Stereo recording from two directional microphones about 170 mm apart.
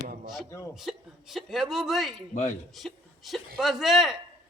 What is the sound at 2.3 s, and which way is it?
Speech, 45° left (ahead or behind).